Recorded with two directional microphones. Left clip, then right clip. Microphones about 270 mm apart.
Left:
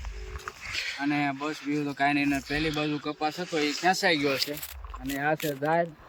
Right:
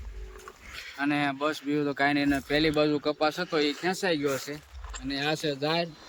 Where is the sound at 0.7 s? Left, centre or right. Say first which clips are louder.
Left 1 dB; centre.